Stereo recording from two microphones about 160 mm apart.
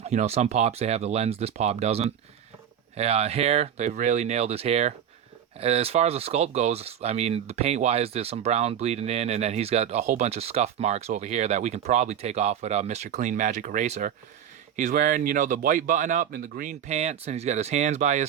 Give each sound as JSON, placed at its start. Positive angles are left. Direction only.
{"t": 0.0, "sound": "speech", "side_deg": -45}